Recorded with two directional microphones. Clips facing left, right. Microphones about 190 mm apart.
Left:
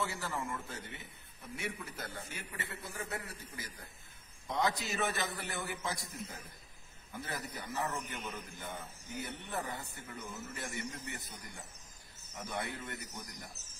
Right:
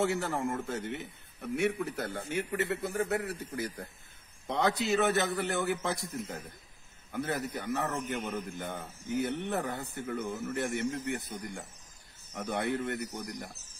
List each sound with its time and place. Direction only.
0.0 s a man's voice: 65° right (ahead or behind)